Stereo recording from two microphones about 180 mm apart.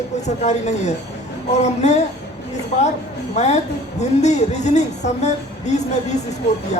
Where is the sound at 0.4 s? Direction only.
40° left (ahead or behind).